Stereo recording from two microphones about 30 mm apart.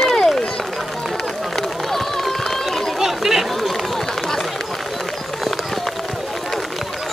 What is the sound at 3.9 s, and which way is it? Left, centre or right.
Run, centre.